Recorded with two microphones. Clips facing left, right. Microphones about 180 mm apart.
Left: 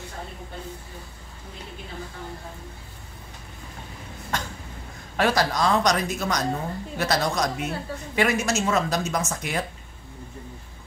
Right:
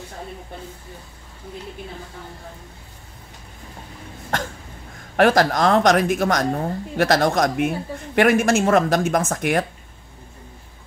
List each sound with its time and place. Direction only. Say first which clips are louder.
5.1 s a woman's voice: right 6 dB; 50° right (ahead or behind)